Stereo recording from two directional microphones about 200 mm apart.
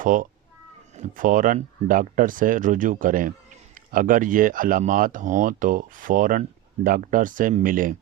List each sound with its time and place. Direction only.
0.0 s speech: 40° right (ahead or behind)